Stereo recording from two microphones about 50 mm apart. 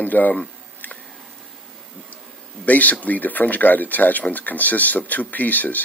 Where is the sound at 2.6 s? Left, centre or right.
Left.